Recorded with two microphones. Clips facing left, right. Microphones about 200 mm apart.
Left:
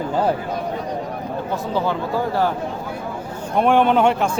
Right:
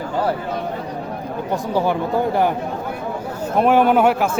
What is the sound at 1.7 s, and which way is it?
Speech, 15° right (ahead or behind).